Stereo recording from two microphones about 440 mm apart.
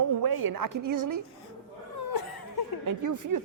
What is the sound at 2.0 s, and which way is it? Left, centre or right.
Laughter, left.